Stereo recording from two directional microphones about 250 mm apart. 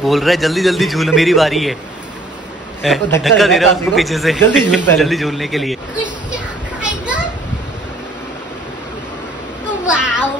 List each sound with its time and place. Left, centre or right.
0.0 s a man's voice: centre
2.8 s a man's voice: centre
6.8 s children playing: centre
9.8 s a sound: centre